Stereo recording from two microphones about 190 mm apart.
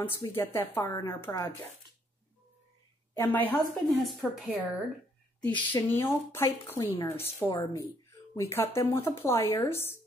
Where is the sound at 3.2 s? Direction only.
10° left (ahead or behind).